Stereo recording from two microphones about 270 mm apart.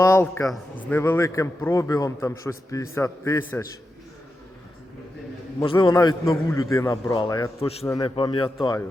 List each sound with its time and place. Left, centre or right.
0.0 s a man's voice: centre
5.5 s a man's voice: centre